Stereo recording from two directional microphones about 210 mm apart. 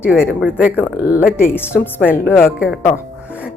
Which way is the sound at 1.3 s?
10° left (ahead or behind).